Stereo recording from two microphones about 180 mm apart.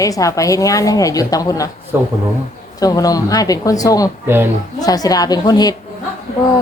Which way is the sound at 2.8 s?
20° left (ahead or behind).